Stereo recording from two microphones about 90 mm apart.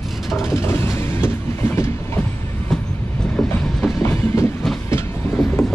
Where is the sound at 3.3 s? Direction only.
5° left (ahead or behind).